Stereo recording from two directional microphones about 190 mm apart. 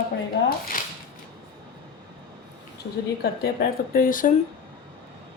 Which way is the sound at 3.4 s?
55° left (ahead or behind).